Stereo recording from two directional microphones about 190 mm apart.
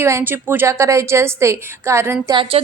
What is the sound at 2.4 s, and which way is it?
Speech, 30° right (ahead or behind).